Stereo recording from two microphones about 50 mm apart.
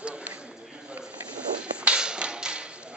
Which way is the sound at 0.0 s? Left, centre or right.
Right.